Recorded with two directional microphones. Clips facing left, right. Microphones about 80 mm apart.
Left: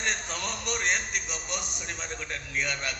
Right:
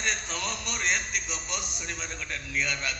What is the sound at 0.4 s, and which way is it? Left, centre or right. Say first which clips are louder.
A man's voice: left 1 dB; left.